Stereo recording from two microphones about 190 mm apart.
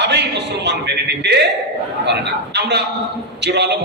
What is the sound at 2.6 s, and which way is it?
A man's voice, 60° right (ahead or behind).